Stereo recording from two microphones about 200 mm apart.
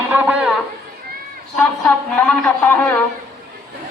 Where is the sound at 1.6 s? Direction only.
5° left (ahead or behind).